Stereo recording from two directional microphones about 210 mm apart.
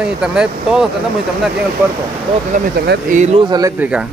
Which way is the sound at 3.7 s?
5° right (ahead or behind).